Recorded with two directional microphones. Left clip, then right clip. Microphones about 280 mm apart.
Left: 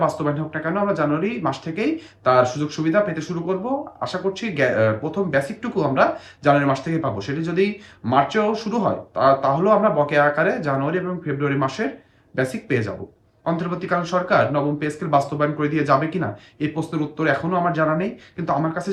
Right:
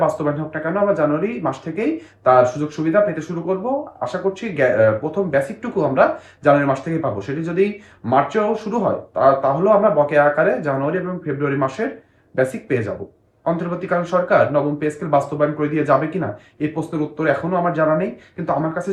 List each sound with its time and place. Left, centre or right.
0.0 s speech: centre